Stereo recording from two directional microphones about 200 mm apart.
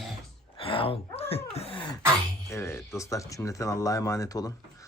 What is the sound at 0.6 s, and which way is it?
Speech, 25° left (ahead or behind).